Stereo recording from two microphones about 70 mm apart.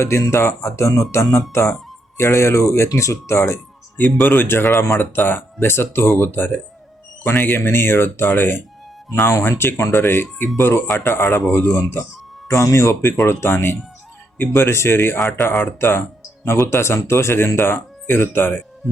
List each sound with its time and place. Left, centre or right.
0.0 s speech: left
3.9 s speech: left